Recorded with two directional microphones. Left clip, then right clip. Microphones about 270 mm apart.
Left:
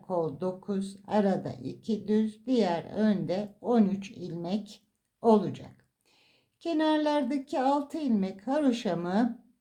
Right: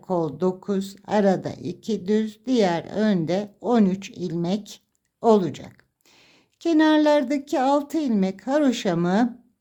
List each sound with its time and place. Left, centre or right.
0.1 s speech: right